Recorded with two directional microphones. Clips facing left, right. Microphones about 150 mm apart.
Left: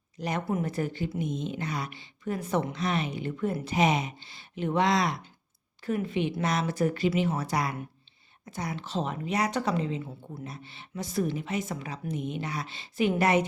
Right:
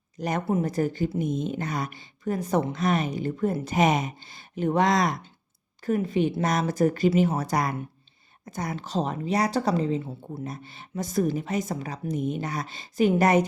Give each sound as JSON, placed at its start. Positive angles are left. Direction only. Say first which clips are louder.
{"t": 0.2, "sound": "a woman's voice", "louder": "right 4 dB", "side_deg": -45}
{"t": 10.4, "sound": "a woman's voice", "louder": "right 5 dB", "side_deg": -45}